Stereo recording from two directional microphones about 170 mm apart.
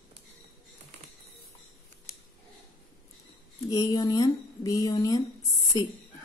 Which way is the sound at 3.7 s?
20° left (ahead or behind).